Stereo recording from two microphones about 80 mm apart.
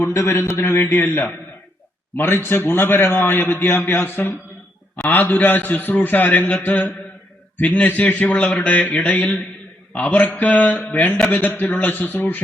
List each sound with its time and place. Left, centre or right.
0.0 s a man's voice: left